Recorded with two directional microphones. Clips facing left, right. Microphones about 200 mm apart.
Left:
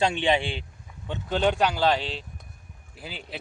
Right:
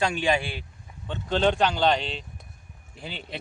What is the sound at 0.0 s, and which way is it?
Speech, 25° left (ahead or behind).